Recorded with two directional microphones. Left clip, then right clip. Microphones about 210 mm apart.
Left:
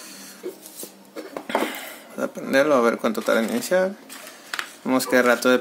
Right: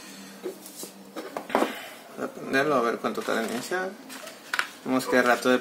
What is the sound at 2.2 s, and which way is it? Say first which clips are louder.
Speech: left 6 dB; 55° left (ahead or behind).